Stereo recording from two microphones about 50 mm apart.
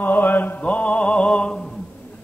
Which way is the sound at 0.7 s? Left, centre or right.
Left.